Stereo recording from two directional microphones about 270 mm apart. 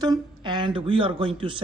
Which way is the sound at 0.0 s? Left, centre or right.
Centre.